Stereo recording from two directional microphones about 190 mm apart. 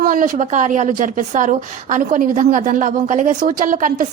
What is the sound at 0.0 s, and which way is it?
A woman's voice, 45° right (ahead or behind).